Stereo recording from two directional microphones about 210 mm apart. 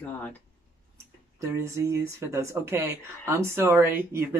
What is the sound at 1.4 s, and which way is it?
Speech, 15° right (ahead or behind).